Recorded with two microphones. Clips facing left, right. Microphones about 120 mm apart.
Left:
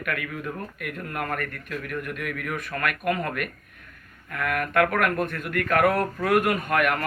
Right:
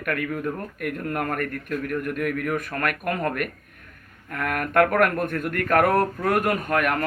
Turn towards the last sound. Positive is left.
turn(degrees=-35)  # may be behind; listen again after turning